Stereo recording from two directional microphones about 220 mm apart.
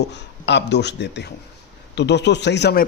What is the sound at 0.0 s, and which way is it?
A man's voice, 50° left (ahead or behind).